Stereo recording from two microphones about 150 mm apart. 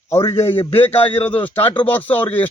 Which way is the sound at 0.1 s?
20° left (ahead or behind).